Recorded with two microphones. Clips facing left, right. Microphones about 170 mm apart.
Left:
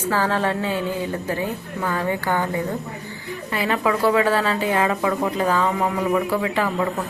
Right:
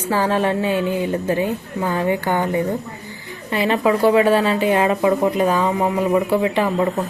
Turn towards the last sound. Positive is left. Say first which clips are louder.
# right 4 dB
turn(degrees=-20)  # may be behind; listen again after turning